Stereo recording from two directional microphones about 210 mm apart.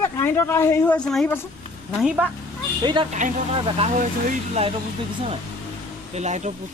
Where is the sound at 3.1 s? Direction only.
35° right (ahead or behind).